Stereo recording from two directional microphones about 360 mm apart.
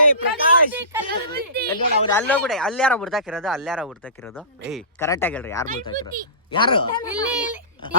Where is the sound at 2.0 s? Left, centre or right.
Centre.